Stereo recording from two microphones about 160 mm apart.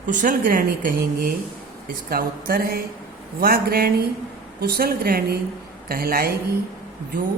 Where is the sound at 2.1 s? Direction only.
70° right (ahead or behind).